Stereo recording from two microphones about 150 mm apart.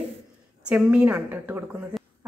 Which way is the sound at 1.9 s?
Centre (ahead or behind).